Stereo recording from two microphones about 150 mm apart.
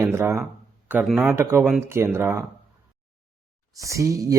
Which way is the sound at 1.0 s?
5° right (ahead or behind).